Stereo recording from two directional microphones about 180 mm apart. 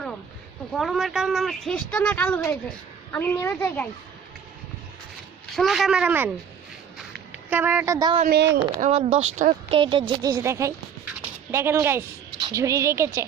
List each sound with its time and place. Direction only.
0.7 s a woman's voice: centre (ahead or behind)
5.5 s speech: centre (ahead or behind); by 8.2 s 20° right (ahead or behind)
8.2 s speech: 65° right (ahead or behind)
8.8 s a woman's voice: 35° right (ahead or behind); by 13.1 s 15° right (ahead or behind)